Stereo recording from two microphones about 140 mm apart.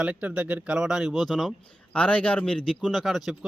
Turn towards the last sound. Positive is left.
turn(degrees=0)  # may be behind; listen again after turning